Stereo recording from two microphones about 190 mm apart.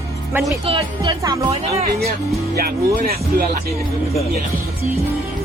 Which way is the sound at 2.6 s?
50° right (ahead or behind).